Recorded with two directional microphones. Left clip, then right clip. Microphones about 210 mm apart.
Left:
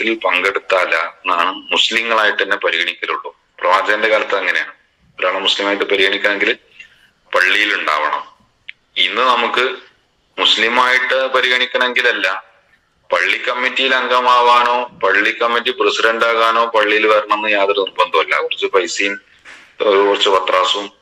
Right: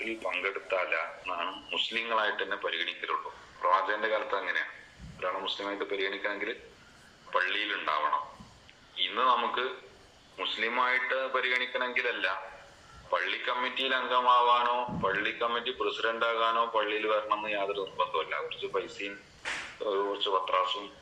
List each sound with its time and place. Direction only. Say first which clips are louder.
0.0 s a man's voice: left 17 dB; 55° left (ahead or behind)